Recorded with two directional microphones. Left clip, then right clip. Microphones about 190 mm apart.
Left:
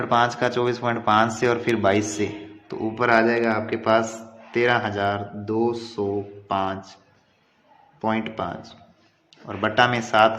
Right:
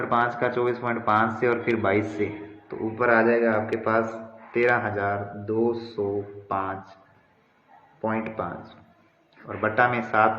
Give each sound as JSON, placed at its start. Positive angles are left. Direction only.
{"t": 0.1, "sound": "speech", "side_deg": 45}
{"t": 8.0, "sound": "speech", "side_deg": 45}